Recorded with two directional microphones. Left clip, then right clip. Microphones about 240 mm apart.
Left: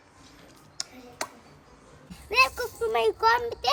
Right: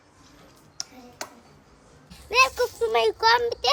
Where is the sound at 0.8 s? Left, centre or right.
Centre.